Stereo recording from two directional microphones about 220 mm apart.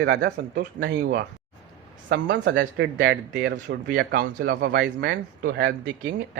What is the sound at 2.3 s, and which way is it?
Speech, 50° right (ahead or behind).